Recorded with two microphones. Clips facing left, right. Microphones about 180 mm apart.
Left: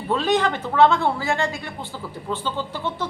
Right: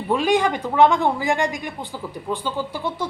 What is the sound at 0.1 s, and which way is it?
Speech, 10° right (ahead or behind).